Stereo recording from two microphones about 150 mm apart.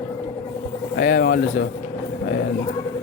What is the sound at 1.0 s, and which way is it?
Bird, 90° left.